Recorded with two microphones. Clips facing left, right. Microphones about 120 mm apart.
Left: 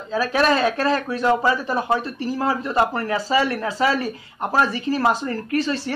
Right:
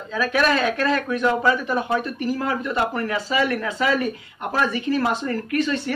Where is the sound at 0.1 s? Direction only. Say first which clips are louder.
Left 2 dB; 35° left (ahead or behind).